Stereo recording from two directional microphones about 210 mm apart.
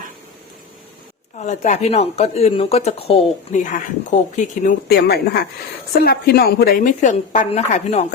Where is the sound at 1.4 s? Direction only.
35° left (ahead or behind).